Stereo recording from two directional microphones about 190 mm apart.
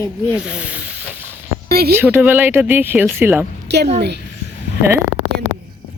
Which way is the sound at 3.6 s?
60° right (ahead or behind).